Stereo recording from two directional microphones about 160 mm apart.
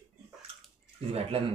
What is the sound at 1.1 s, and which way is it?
Speech, 40° right (ahead or behind).